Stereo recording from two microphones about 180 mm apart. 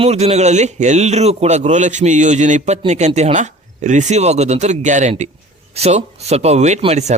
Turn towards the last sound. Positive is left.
turn(degrees=-35)  # may be behind; listen again after turning